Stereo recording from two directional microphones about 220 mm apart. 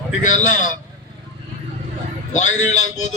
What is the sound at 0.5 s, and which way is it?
Speech, 35° left (ahead or behind).